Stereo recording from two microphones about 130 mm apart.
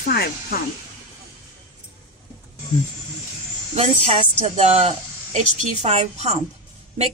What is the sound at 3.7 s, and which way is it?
Speech, 50° right (ahead or behind).